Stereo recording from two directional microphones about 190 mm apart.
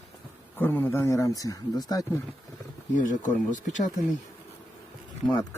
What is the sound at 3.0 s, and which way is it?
Speech, 40° left (ahead or behind).